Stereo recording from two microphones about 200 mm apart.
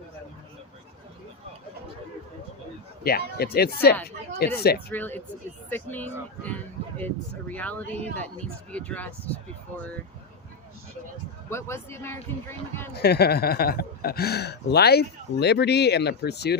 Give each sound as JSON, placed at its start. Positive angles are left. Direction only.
{"t": 3.0, "sound": "speech", "side_deg": 50}
{"t": 4.9, "sound": "speech", "side_deg": 10}
{"t": 11.4, "sound": "speech", "side_deg": 10}
{"t": 12.9, "sound": "speech", "side_deg": 55}